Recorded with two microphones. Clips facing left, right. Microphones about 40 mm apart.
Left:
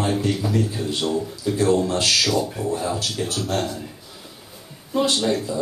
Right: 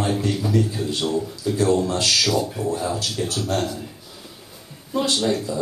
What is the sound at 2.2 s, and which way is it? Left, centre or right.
A man's voice, centre.